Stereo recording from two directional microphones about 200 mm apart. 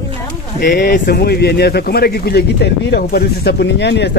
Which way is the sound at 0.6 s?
55° left (ahead or behind).